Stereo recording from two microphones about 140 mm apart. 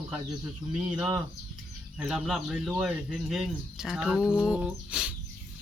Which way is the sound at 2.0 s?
5° right (ahead or behind).